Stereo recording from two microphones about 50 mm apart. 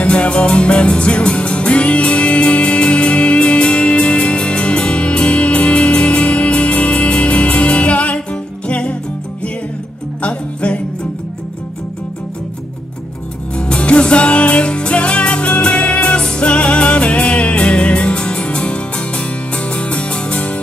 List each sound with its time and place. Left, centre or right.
0.0 s music: left
10.2 s music: left
13.6 s music: left